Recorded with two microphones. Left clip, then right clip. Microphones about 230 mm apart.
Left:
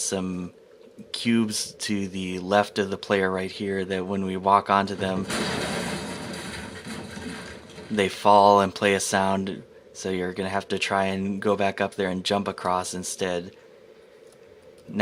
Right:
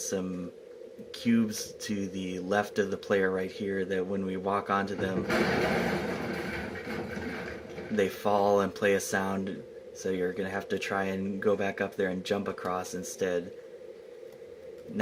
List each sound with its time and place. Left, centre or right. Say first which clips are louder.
0.0 s speech: left 4 dB; left
6.8 s a sound: right 1 dB; left
10.0 s speech: left 3 dB; left